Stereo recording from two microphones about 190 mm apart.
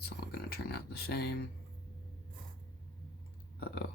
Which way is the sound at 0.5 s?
55° left (ahead or behind).